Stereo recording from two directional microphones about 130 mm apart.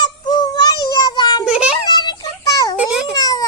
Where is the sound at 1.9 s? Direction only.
30° left (ahead or behind).